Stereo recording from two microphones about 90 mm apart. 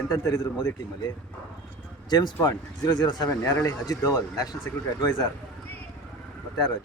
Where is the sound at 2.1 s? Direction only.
50° left (ahead or behind).